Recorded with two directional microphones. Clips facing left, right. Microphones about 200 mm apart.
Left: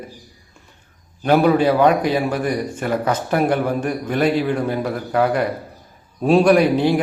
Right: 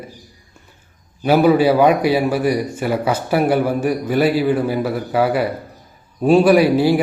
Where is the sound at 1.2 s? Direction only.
5° right (ahead or behind).